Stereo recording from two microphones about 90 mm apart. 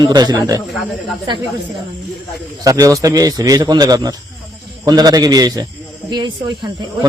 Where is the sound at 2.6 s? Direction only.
40° right (ahead or behind).